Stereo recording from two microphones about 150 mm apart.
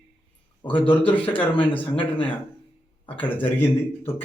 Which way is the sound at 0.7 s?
35° left (ahead or behind).